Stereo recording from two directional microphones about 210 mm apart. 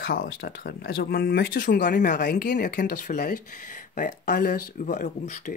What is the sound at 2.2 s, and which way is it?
Speech, 50° left (ahead or behind).